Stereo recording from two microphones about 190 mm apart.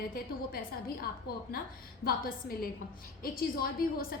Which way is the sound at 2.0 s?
50° left (ahead or behind).